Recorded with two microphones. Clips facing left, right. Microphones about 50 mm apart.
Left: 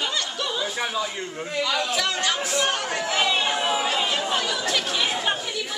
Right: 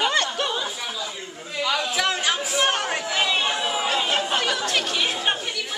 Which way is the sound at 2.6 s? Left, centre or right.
Right.